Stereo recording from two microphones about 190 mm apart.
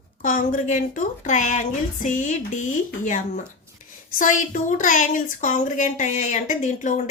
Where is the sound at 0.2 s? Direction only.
40° left (ahead or behind).